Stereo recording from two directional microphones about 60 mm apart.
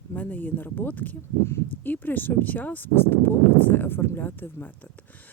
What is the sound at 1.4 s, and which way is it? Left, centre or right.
Speech, left.